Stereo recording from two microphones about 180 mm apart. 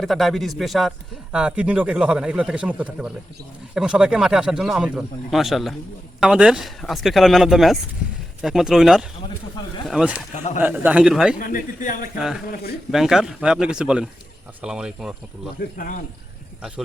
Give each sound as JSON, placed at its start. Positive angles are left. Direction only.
{"t": 0.0, "sound": "speech", "side_deg": 0}
{"t": 11.3, "sound": "speech", "side_deg": 50}
{"t": 12.9, "sound": "speech", "side_deg": 0}